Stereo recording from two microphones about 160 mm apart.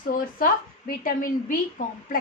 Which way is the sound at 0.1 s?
60° left (ahead or behind).